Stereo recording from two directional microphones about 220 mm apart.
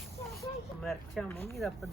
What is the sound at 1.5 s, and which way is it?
Speech, centre (ahead or behind).